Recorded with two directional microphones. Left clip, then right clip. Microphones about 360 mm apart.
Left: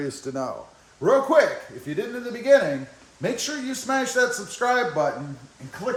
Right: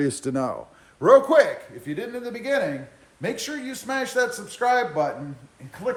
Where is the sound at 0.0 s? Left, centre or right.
Right.